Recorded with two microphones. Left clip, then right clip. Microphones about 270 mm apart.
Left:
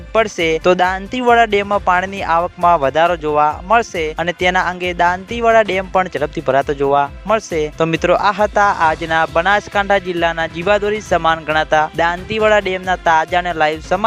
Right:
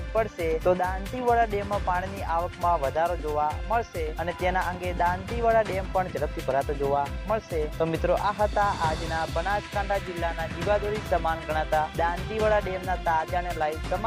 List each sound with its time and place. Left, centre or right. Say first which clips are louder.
0.1 s speech: left 11 dB; left
11.6 s speech: left 10 dB; left